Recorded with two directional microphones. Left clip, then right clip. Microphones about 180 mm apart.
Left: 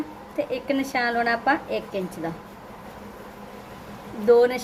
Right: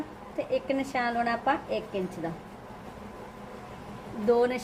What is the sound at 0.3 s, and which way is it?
A woman's voice, 20° left (ahead or behind).